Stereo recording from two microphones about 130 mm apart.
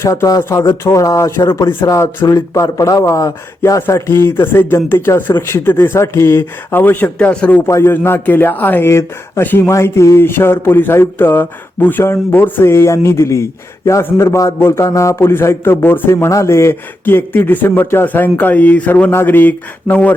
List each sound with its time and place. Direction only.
0.0 s speech: 25° left (ahead or behind)